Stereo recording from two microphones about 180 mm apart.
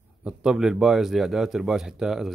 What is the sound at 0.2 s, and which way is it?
Speech, 5° right (ahead or behind).